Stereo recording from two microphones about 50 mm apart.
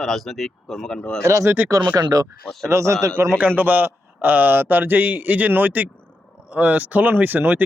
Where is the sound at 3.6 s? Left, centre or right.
Right.